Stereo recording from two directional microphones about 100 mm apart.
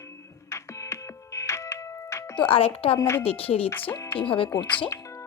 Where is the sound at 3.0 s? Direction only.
30° left (ahead or behind).